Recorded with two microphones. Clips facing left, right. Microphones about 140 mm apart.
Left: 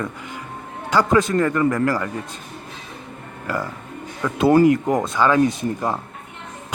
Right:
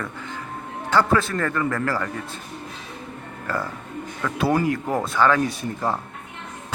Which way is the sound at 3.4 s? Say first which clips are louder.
Left 2 dB; 10° left (ahead or behind).